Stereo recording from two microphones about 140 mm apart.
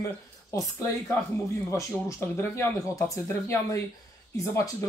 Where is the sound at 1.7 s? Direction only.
20° left (ahead or behind).